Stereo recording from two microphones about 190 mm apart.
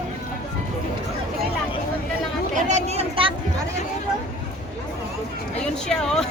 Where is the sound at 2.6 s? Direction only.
40° right (ahead or behind).